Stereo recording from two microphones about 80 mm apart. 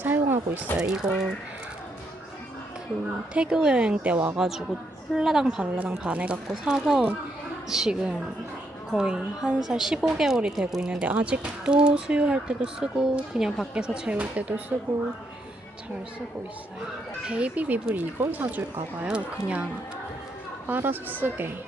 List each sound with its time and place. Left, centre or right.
0.0 s a sound: right
0.8 s speech: centre
3.3 s speech: centre
4.4 s speech: centre
17.2 s a woman's voice: centre
20.7 s a woman's voice: right